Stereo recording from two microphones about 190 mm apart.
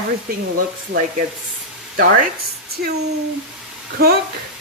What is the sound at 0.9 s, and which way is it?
Speech, 60° right (ahead or behind).